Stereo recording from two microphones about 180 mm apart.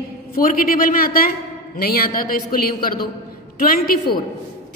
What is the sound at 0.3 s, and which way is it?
A woman's voice, 50° left (ahead or behind).